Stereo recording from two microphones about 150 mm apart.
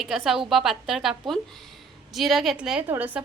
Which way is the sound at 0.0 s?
Centre (ahead or behind).